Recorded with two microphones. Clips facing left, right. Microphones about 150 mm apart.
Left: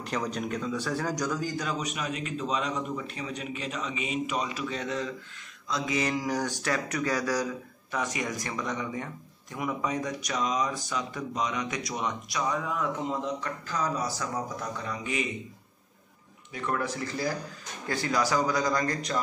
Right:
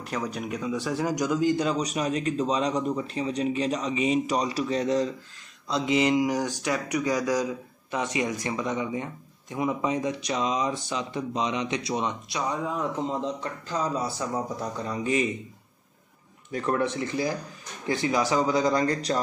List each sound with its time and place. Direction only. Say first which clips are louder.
0.0 s a man's voice: even; 5° right (ahead or behind); by 15.2 s 35° right (ahead or behind)
16.5 s speech: right 5 dB; 30° right (ahead or behind)